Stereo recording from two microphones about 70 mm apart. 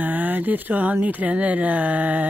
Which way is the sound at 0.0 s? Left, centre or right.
Right.